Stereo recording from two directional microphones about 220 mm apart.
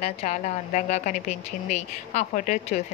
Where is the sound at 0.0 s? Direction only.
30° left (ahead or behind).